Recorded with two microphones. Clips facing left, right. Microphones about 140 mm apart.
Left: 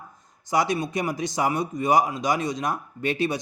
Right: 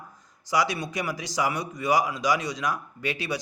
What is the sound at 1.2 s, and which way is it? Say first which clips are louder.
Speech: left 2 dB; 50° left (ahead or behind).